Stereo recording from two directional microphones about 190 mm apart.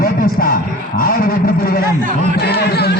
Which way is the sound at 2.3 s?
60° left (ahead or behind).